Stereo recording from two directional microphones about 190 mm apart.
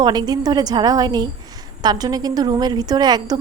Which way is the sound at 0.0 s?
20° right (ahead or behind).